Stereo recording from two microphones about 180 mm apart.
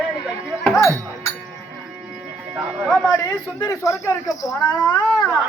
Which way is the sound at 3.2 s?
20° left (ahead or behind).